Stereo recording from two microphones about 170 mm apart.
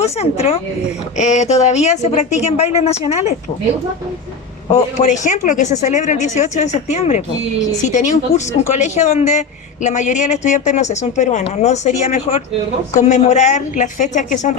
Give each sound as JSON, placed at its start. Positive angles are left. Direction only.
{"t": 0.0, "sound": "speech", "side_deg": 35}
{"t": 4.7, "sound": "speech", "side_deg": 45}